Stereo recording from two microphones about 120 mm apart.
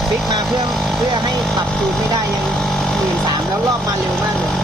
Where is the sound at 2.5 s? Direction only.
5° left (ahead or behind).